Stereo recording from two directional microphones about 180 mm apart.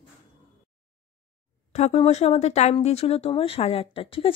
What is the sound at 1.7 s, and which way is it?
Speech, 40° left (ahead or behind).